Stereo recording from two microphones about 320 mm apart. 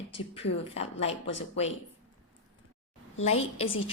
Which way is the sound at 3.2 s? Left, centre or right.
Centre.